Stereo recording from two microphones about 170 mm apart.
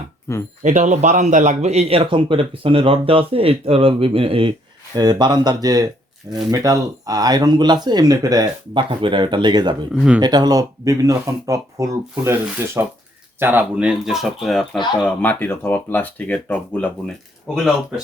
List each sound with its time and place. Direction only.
0.3 s speech: 15° left (ahead or behind)
0.6 s a man's voice: 45° right (ahead or behind); by 9.7 s 25° right (ahead or behind)
9.9 s speech: 5° right (ahead or behind)
10.2 s speech: 25° right (ahead or behind); by 16.9 s 10° left (ahead or behind)
17.5 s speech: 5° right (ahead or behind)